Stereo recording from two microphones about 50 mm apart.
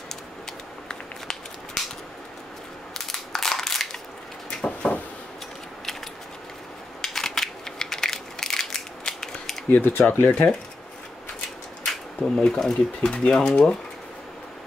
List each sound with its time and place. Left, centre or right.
0.1 s a sound: centre
2.9 s crushing: centre
4.5 s a sound: centre
7.0 s crushing: centre
10.0 s speech: left
11.8 s speech: centre